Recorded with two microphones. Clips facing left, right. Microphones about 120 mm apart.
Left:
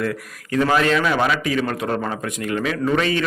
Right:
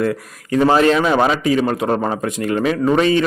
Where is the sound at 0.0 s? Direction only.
30° right (ahead or behind).